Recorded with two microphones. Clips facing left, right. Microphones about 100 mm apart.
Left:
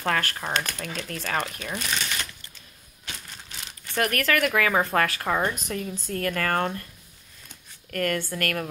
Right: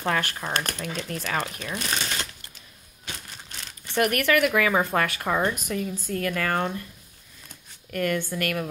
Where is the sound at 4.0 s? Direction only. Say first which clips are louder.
Right 2 dB; 15° right (ahead or behind).